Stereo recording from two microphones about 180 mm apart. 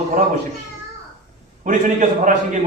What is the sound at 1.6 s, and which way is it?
Speech, 45° right (ahead or behind).